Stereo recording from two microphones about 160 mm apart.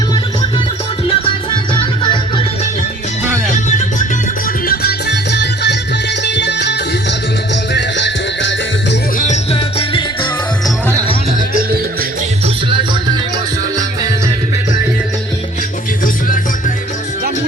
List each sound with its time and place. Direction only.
1.2 s music: 30° left (ahead or behind)
3.5 s music: 50° left (ahead or behind)
4.6 s music: 70° left (ahead or behind); by 8.1 s 90° left
9.2 s music: 40° left (ahead or behind)
11.3 s music: 60° right (ahead or behind)
12.7 s music: 30° right (ahead or behind)